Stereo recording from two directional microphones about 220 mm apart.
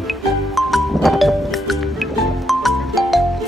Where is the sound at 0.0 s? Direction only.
Centre (ahead or behind).